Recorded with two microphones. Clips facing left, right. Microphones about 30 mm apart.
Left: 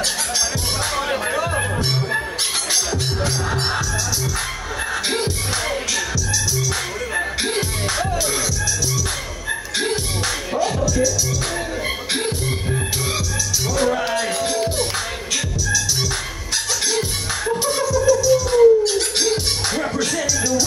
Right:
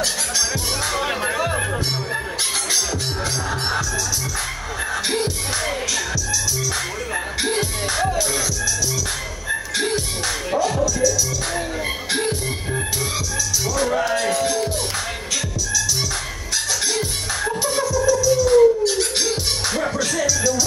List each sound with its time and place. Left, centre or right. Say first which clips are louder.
1.1 s music: left 2 dB; centre
5.0 s music: even; centre
12.1 s music: right 2 dB; centre
13.7 s music: left 1 dB; centre
18.4 s music: right 1 dB; centre